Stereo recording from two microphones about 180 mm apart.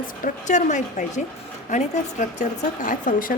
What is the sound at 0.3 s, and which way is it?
A woman's voice, 45° left (ahead or behind).